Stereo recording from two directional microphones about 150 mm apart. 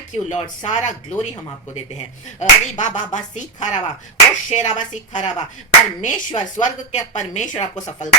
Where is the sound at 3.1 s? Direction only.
55° left (ahead or behind).